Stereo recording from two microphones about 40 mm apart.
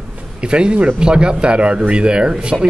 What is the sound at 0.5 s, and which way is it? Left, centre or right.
A man's voice, right.